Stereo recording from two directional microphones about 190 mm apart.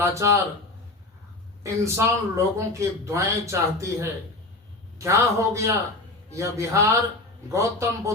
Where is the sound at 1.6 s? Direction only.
15° right (ahead or behind).